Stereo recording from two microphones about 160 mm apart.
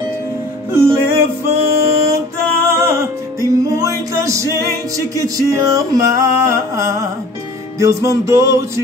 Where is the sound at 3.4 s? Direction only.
20° right (ahead or behind).